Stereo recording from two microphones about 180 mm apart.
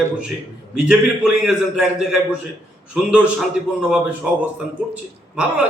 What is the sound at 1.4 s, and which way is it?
Speech, 5° right (ahead or behind).